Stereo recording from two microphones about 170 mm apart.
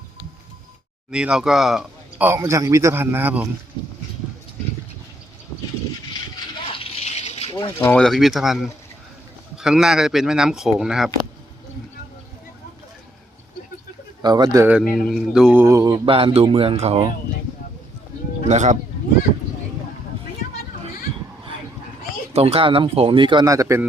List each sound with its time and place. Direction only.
1.1 s speech: 5° right (ahead or behind)
6.7 s water: 35° left (ahead or behind)
7.8 s speech: 10° left (ahead or behind)
14.2 s speech: 25° right (ahead or behind)
14.7 s speech: 5° right (ahead or behind)
15.6 s speech: 20° right (ahead or behind)
16.0 s speech: 30° right (ahead or behind)
18.4 s speech: 45° right (ahead or behind)
22.3 s speech: 40° right (ahead or behind); by 23.8 s 20° right (ahead or behind)